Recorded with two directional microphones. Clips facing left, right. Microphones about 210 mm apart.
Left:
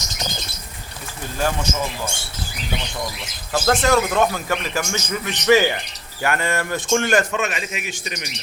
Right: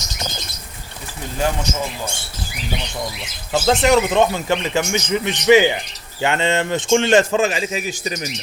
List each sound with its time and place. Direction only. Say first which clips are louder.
3.5 s speech: right 3 dB; 20° right (ahead or behind); by 8.3 s 35° right (ahead or behind)